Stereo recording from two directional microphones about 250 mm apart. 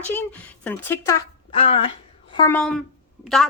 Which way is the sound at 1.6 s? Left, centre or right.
Left.